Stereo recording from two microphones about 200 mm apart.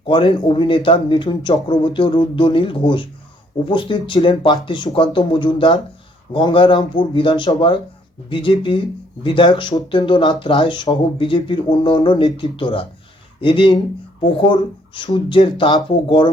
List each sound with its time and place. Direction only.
0.1 s speech: 25° left (ahead or behind)